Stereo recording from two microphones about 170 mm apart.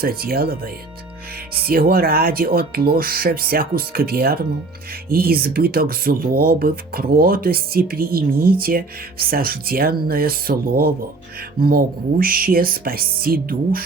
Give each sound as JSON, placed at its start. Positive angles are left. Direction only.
{"t": 0.0, "sound": "speech", "side_deg": -60}